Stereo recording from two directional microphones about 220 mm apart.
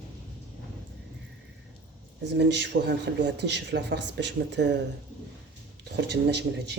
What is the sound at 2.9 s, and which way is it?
Speech, 50° right (ahead or behind).